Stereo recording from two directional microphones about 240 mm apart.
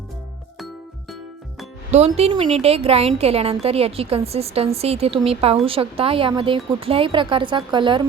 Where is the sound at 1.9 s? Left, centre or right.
Right.